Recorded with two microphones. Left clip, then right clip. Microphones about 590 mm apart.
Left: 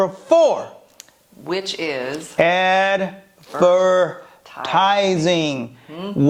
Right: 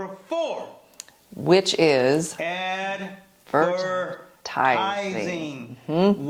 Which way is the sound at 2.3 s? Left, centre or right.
Left.